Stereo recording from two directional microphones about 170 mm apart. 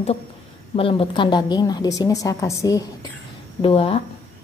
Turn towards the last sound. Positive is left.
turn(degrees=35)  # may be behind; listen again after turning